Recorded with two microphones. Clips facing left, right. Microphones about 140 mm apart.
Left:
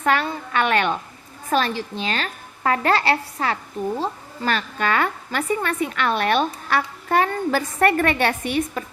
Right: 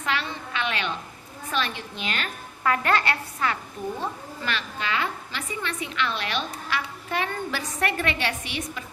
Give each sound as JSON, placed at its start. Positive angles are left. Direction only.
{"t": 0.0, "sound": "a sound", "side_deg": 50}
{"t": 1.5, "sound": "a woman's voice", "side_deg": 40}
{"t": 4.0, "sound": "speech", "side_deg": 40}